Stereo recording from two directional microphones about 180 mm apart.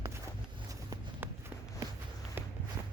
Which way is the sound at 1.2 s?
10° right (ahead or behind).